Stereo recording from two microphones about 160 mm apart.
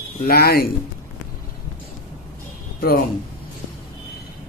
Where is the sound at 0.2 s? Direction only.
75° left (ahead or behind).